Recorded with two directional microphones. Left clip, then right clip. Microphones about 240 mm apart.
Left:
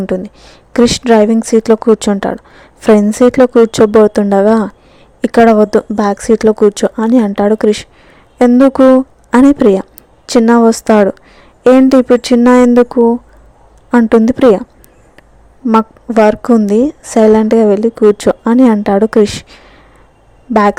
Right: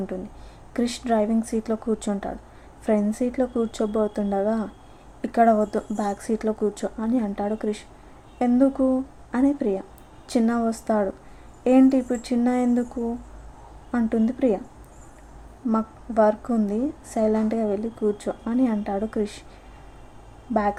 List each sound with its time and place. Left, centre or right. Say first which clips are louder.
0.0 s speech: left 15 dB; left
15.6 s speech: left 15 dB; left